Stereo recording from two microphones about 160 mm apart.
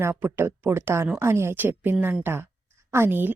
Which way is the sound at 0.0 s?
15° right (ahead or behind).